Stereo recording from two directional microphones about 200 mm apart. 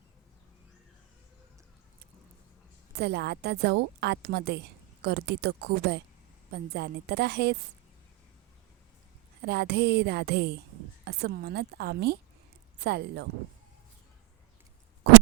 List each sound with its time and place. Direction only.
3.0 s a woman's voice: 55° right (ahead or behind)
9.5 s a woman's voice: 55° right (ahead or behind)